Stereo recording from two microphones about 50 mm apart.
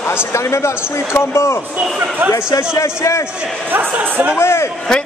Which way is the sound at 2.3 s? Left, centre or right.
Left.